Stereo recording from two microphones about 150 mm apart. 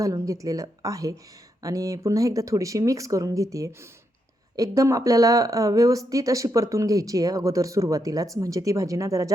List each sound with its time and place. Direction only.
0.0 s speech: 20° right (ahead or behind)